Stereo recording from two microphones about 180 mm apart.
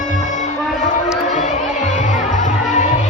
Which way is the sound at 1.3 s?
40° left (ahead or behind).